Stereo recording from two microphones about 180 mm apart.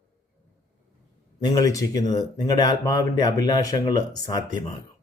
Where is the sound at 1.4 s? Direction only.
20° left (ahead or behind).